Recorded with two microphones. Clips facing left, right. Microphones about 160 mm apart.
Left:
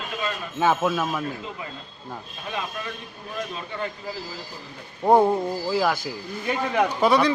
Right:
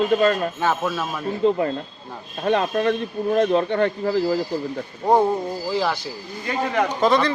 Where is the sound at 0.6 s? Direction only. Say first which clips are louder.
Left 1 dB; 10° left (ahead or behind).